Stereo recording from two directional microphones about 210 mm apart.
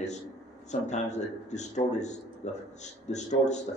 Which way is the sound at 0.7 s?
35° left (ahead or behind).